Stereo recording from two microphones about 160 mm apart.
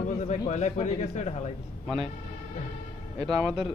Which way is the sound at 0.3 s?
45° left (ahead or behind).